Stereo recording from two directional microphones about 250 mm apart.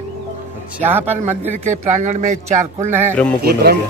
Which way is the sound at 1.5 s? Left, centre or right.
Right.